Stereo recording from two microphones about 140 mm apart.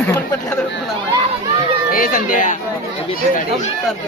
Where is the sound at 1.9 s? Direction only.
90° left; by 2.6 s 70° left (ahead or behind).